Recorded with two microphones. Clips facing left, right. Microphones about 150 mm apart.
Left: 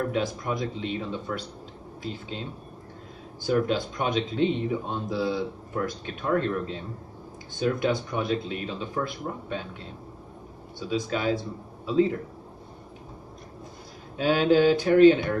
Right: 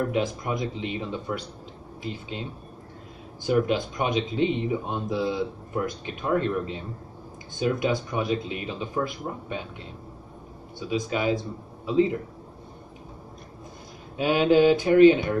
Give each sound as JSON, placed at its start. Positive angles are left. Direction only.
{"t": 0.1, "sound": "a man's voice", "side_deg": -10}
{"t": 3.4, "sound": "a man's voice", "side_deg": -10}
{"t": 10.9, "sound": "a man's voice", "side_deg": -10}
{"t": 14.1, "sound": "a man's voice", "side_deg": -10}